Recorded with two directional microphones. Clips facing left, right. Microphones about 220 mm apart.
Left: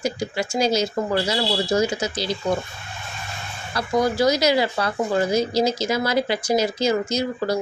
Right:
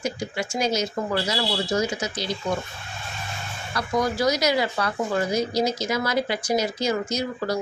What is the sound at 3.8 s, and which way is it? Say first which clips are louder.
Speech: left 4 dB; 30° left (ahead or behind).